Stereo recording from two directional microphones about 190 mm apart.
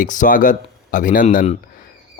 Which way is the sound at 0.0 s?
45° left (ahead or behind).